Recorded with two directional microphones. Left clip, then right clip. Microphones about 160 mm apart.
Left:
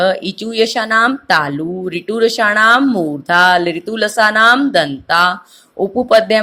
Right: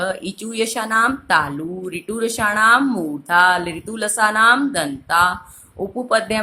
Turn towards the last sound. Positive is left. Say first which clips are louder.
# left 8 dB
turn(degrees=30)  # may be behind; listen again after turning